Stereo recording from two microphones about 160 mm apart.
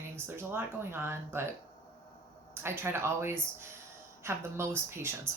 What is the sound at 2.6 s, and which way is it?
A woman's voice, 15° right (ahead or behind).